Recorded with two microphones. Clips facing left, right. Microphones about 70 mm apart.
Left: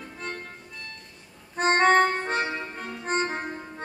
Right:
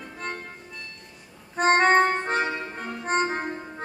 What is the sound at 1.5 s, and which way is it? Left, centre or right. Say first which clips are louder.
Music: right 1 dB; centre.